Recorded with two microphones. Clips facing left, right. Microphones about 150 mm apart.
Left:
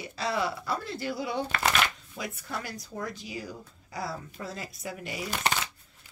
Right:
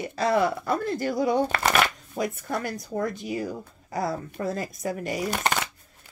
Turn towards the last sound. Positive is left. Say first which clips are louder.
# right 4 dB
turn(degrees=-50)  # may be behind; listen again after turning